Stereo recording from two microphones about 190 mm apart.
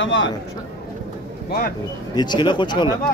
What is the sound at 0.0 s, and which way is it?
Speech, 75° left (ahead or behind).